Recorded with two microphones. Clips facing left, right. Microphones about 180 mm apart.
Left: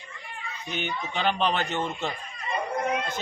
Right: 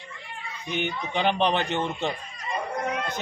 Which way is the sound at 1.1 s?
15° right (ahead or behind).